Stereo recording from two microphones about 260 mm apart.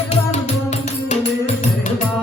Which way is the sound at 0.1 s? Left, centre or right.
Left.